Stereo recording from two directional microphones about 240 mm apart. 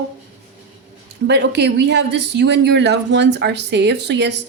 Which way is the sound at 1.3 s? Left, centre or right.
Right.